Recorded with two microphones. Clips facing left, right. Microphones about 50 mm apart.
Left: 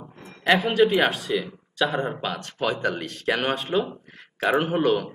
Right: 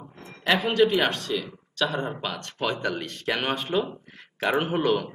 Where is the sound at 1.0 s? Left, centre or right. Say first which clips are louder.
Left 3 dB; centre.